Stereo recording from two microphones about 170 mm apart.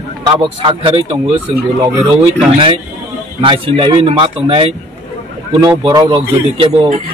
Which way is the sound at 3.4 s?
30° right (ahead or behind).